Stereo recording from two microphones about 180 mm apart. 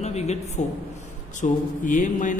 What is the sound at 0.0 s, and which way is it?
A woman's voice, 40° left (ahead or behind).